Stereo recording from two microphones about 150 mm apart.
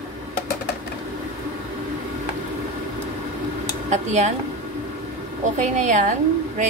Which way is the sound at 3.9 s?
50° right (ahead or behind).